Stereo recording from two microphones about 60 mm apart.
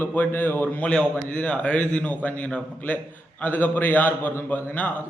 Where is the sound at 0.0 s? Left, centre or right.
Left.